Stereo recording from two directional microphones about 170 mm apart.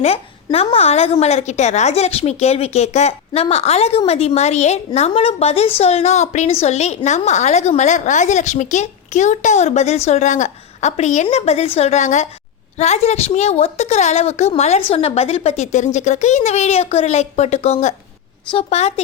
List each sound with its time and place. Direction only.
0.0 s a woman's voice: 35° left (ahead or behind)